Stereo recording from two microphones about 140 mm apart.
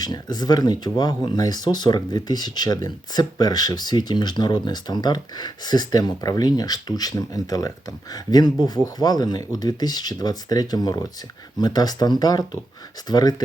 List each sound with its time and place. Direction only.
0.0 s speech: 30° left (ahead or behind)